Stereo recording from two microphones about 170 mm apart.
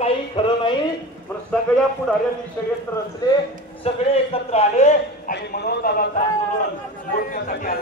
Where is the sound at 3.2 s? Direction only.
25° left (ahead or behind).